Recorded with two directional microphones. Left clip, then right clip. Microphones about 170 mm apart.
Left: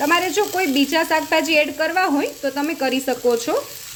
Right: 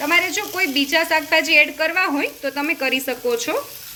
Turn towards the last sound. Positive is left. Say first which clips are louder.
# left 3 dB
turn(degrees=35)  # may be behind; listen again after turning